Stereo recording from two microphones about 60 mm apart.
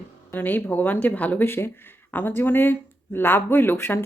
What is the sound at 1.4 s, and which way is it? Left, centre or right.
Speech, left.